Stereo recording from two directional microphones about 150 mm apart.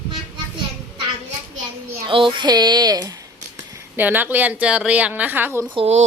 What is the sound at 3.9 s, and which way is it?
A woman's voice, 10° right (ahead or behind).